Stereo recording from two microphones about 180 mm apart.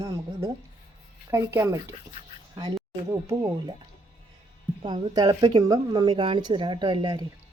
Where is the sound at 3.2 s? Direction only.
20° right (ahead or behind).